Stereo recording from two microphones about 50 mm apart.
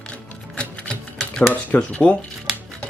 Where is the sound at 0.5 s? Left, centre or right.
Left.